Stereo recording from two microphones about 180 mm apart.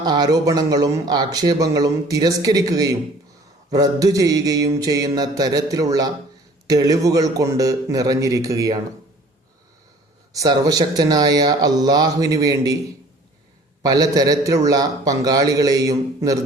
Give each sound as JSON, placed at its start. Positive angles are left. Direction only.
{"t": 0.0, "sound": "speech", "side_deg": -20}
{"t": 10.3, "sound": "speech", "side_deg": -20}
{"t": 13.8, "sound": "speech", "side_deg": -20}